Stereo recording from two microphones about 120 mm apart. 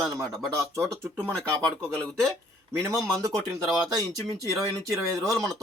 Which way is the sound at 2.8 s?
25° right (ahead or behind).